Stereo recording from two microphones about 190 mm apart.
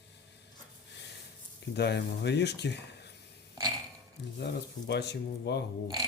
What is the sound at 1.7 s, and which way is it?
Speech, 60° left (ahead or behind).